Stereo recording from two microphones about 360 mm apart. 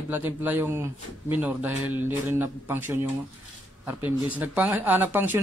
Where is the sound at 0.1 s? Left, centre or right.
Centre.